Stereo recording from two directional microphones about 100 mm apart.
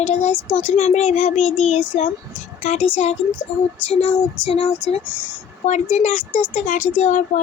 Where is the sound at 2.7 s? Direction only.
80° left.